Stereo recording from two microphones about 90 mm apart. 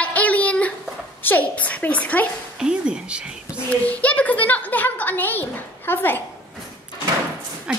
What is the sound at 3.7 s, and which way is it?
A woman's voice, 15° left (ahead or behind).